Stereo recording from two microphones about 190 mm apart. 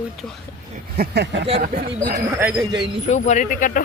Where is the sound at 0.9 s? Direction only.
55° right (ahead or behind).